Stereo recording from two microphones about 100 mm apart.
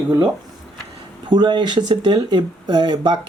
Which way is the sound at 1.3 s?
45° right (ahead or behind).